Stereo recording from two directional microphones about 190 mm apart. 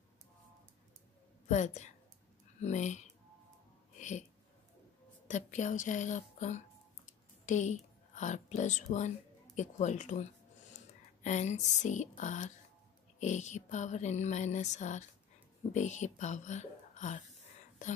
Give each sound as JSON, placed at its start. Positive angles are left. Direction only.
{"t": 1.5, "sound": "music", "side_deg": 40}
{"t": 5.3, "sound": "music", "side_deg": 40}
{"t": 7.1, "sound": "speech", "side_deg": 40}
{"t": 9.6, "sound": "music", "side_deg": 40}
{"t": 11.2, "sound": "music", "side_deg": 40}